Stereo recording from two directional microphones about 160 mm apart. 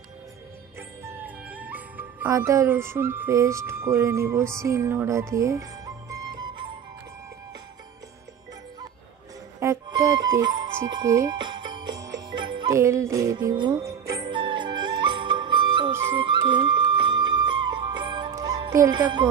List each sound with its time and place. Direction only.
0.7 s speech: 15° right (ahead or behind)
9.6 s speech: 20° right (ahead or behind)
12.0 s music: 25° right (ahead or behind)
18.7 s speech: 25° right (ahead or behind)